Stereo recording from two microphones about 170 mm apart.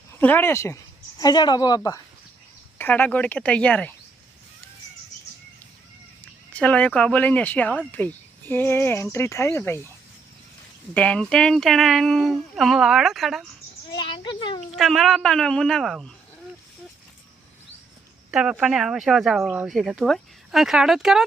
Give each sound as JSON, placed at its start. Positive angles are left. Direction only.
{"t": 0.2, "sound": "speech", "side_deg": 10}
{"t": 2.7, "sound": "speech", "side_deg": 10}
{"t": 6.5, "sound": "speech", "side_deg": 10}
{"t": 10.9, "sound": "speech", "side_deg": 5}
{"t": 13.9, "sound": "a sound", "side_deg": 25}
{"t": 14.8, "sound": "speech", "side_deg": 0}
{"t": 18.3, "sound": "speech", "side_deg": -5}